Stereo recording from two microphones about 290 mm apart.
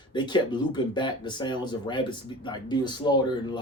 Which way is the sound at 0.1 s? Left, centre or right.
Centre.